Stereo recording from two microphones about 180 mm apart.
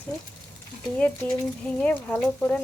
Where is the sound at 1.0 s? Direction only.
5° left (ahead or behind).